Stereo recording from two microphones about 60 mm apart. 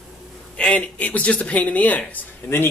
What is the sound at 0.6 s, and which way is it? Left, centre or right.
Speech, centre.